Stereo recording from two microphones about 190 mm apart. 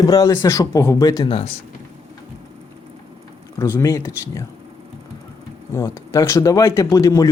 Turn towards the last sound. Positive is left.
turn(degrees=20)  # may be behind; listen again after turning